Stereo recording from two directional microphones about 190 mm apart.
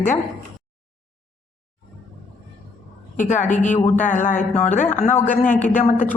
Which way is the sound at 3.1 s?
40° left (ahead or behind).